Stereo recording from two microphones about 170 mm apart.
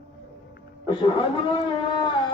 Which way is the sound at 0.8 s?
30° left (ahead or behind).